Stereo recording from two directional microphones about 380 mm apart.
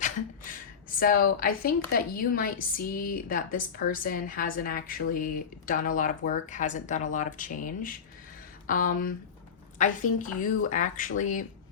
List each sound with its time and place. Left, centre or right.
0.5 s a woman's voice: left